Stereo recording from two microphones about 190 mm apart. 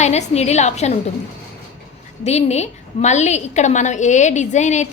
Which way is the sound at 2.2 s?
35° left (ahead or behind).